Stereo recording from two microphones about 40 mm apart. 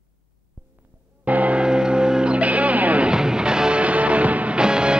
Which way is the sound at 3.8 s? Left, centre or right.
Right.